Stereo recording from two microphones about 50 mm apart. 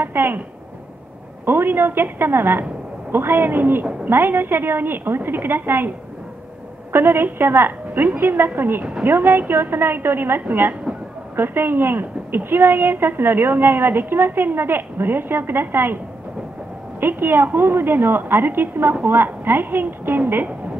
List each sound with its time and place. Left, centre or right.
0.0 s a woman's voice: right
1.4 s a woman's voice: right
6.9 s a woman's voice: right
17.0 s a woman's voice: right